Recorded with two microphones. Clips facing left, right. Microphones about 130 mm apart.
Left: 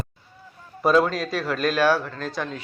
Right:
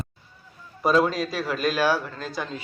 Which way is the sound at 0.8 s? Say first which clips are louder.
Left 1 dB; centre (ahead or behind).